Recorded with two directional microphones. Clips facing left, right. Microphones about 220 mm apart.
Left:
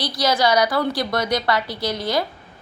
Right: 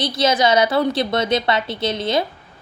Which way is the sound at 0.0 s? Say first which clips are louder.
Right 2 dB; 25° right (ahead or behind).